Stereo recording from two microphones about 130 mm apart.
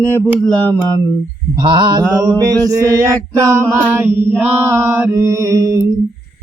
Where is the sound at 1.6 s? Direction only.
35° right (ahead or behind).